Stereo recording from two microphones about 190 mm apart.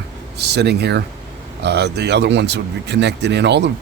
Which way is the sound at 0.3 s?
60° right (ahead or behind).